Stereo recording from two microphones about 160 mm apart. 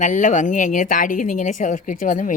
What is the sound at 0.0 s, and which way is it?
A woman's voice, 50° left (ahead or behind).